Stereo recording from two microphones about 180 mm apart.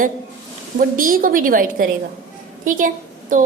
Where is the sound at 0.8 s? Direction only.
50° right (ahead or behind).